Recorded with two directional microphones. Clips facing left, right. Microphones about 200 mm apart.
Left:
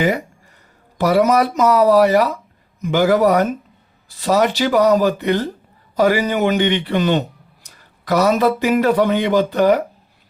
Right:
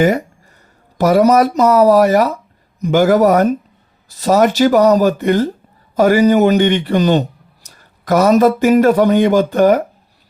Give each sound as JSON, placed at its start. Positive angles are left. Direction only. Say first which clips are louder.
{"t": 0.9, "sound": "a man's voice", "louder": "right 4 dB", "side_deg": -45}